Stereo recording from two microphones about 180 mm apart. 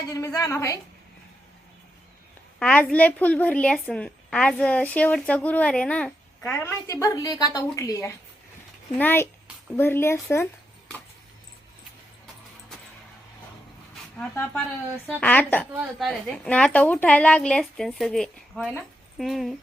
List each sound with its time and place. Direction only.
0.1 s a woman's voice: 15° left (ahead or behind)
2.6 s a woman's voice: 5° left (ahead or behind)
14.2 s a woman's voice: 5° left (ahead or behind)